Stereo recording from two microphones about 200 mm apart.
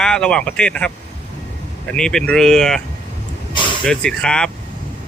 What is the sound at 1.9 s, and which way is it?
Speech, 5° left (ahead or behind).